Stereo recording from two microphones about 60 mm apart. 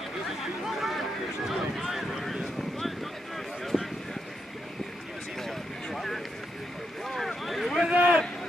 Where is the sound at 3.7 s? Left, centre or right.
Centre.